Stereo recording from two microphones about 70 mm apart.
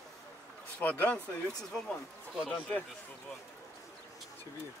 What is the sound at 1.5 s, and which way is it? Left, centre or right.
Speech, centre.